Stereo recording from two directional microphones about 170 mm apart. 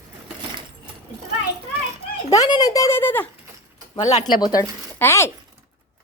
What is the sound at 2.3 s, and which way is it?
Speech, 20° left (ahead or behind).